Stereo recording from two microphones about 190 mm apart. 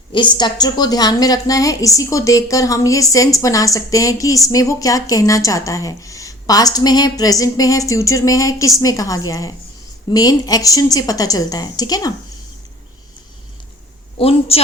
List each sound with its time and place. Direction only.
0.1 s a woman's voice: 25° left (ahead or behind)
14.2 s a woman's voice: 30° left (ahead or behind)